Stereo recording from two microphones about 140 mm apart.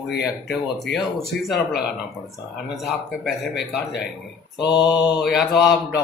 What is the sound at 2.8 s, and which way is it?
A man's voice, centre (ahead or behind).